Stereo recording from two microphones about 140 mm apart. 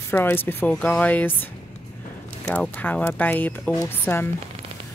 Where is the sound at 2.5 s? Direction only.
10° left (ahead or behind).